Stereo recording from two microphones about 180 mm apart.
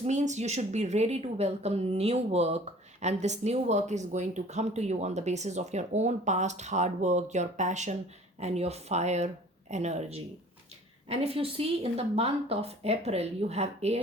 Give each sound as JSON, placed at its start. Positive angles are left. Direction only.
{"t": 0.0, "sound": "speech", "side_deg": -40}